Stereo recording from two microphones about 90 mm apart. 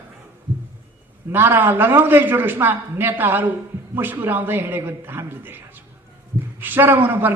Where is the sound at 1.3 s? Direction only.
25° right (ahead or behind).